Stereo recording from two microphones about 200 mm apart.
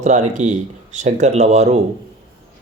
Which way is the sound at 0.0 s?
35° right (ahead or behind).